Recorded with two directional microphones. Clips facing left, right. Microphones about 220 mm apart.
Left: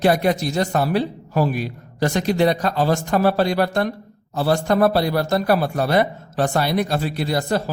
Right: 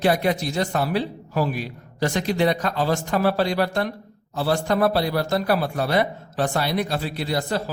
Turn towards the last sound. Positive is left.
turn(degrees=45)  # may be behind; listen again after turning